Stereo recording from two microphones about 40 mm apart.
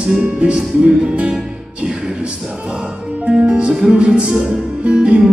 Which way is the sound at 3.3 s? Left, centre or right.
Right.